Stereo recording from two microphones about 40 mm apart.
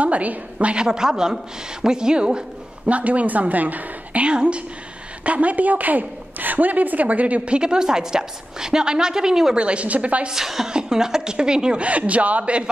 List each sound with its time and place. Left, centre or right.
0.0 s a woman's voice: right
0.8 s a woman's voice: centre
2.9 s a woman's voice: right
4.3 s a woman's voice: right
7.5 s a woman's voice: right
9.6 s a woman's voice: right
10.2 s a woman's voice: centre
11.8 s a woman's voice: right